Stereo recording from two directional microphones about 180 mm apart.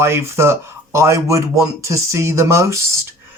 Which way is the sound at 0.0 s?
15° right (ahead or behind).